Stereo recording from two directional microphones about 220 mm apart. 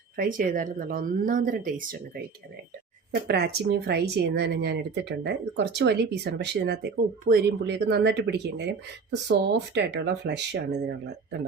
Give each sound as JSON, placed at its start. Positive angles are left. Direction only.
{"t": 0.2, "sound": "speech", "side_deg": -40}
{"t": 3.2, "sound": "speech", "side_deg": -45}